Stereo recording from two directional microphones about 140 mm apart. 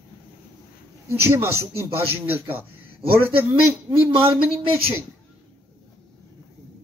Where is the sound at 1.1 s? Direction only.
20° right (ahead or behind).